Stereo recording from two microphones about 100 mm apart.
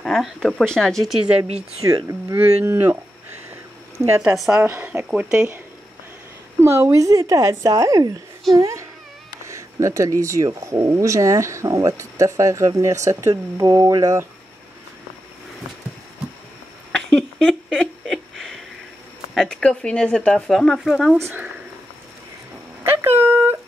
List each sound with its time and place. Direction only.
0.0 s speech: 5° left (ahead or behind)
1.9 s speech: 35° right (ahead or behind)
2.6 s speech: 20° right (ahead or behind)
4.0 s speech: 15° right (ahead or behind)
6.6 s speech: 25° right (ahead or behind)
17.4 s a sound: centre (ahead or behind)
19.3 s speech: 10° left (ahead or behind)
20.9 s speech: 5° right (ahead or behind)
21.2 s speech: 20° right (ahead or behind)
22.8 s a sound: 25° right (ahead or behind)